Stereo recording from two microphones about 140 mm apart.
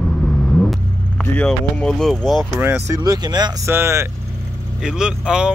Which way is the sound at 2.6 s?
15° right (ahead or behind).